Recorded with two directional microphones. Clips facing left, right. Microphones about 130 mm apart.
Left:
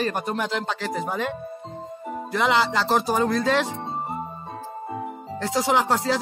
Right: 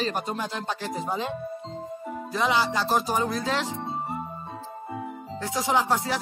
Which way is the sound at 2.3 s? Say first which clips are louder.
Left 3 dB; 75° left (ahead or behind).